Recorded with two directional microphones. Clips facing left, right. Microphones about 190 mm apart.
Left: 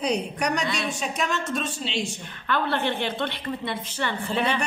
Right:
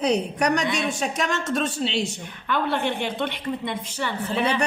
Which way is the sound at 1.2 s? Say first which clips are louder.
Right 2 dB; 70° right (ahead or behind).